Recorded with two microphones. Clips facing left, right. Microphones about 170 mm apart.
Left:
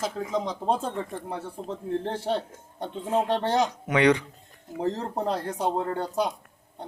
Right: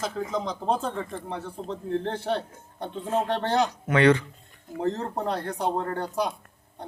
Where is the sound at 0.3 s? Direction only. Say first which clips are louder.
Left 2 dB; 5° left (ahead or behind).